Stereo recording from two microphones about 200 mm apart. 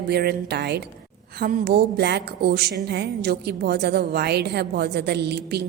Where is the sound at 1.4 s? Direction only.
45° right (ahead or behind).